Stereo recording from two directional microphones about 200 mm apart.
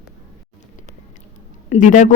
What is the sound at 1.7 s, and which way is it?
Speech, 35° left (ahead or behind).